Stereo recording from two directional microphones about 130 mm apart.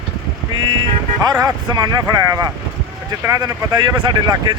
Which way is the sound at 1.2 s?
30° right (ahead or behind).